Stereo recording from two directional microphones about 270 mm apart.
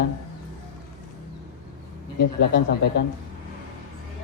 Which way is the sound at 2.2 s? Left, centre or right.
Left.